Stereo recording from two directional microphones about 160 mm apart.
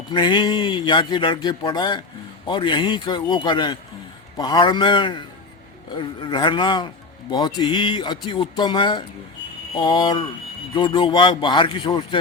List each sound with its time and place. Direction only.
0.1 s a man's voice: 30° left (ahead or behind)